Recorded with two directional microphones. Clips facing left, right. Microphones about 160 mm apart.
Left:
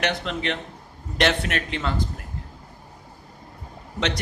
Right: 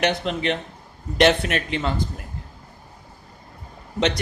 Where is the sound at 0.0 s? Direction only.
15° right (ahead or behind).